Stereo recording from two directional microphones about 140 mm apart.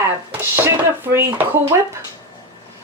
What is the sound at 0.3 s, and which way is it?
Dishes, 15° right (ahead or behind).